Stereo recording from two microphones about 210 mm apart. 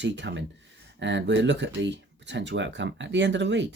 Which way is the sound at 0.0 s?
60° right (ahead or behind).